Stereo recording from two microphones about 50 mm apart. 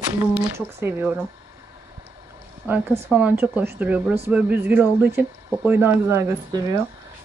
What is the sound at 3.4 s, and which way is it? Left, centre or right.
Speech, right.